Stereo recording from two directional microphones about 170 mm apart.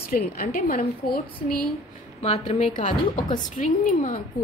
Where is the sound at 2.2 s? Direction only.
40° left (ahead or behind).